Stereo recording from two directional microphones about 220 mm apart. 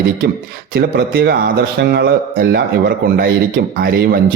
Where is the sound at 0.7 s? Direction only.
45° right (ahead or behind).